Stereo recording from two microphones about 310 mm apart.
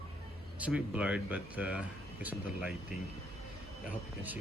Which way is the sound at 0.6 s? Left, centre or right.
Centre.